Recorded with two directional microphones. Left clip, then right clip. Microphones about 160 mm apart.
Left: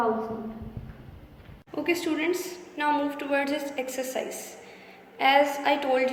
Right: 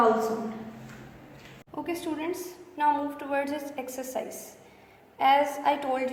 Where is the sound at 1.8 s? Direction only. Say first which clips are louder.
Left 6 dB; 40° right (ahead or behind).